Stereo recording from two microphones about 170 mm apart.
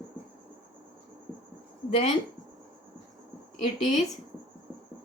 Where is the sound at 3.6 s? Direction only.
45° left (ahead or behind).